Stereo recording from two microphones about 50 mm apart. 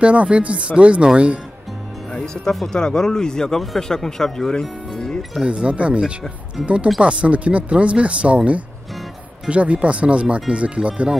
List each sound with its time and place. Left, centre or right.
0.0 s speech: right
2.1 s speech: centre
5.5 s speech: right
9.5 s speech: right